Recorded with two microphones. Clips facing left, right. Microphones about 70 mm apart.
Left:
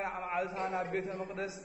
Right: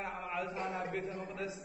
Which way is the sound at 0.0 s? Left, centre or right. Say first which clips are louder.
Left 4 dB; left.